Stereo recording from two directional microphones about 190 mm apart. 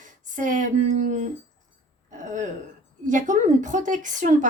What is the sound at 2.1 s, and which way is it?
Throat clearing, 40° right (ahead or behind).